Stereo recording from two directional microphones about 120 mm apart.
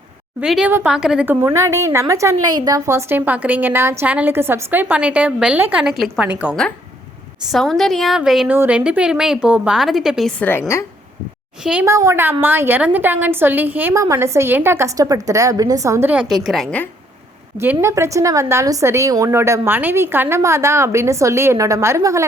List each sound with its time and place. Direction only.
0.4 s a woman's voice: 5° right (ahead or behind)
1.3 s a woman's voice: 20° right (ahead or behind)
2.3 s a woman's voice: 35° right (ahead or behind); by 5.8 s 15° right (ahead or behind)
5.8 s a woman's voice: 5° right (ahead or behind)
7.5 s a woman's voice: centre (ahead or behind)
8.4 s a woman's voice: 15° right (ahead or behind)
10.4 s a woman's voice: 20° left (ahead or behind)
11.6 s a woman's voice: 10° right (ahead or behind)
11.9 s a woman's voice: 25° right (ahead or behind)
16.3 s a woman's voice: centre (ahead or behind)
17.6 s a woman's voice: 20° right (ahead or behind)